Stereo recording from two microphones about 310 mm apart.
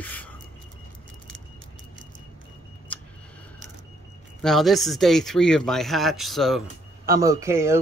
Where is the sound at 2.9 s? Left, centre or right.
Centre.